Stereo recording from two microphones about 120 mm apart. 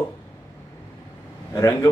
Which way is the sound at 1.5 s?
30° left (ahead or behind).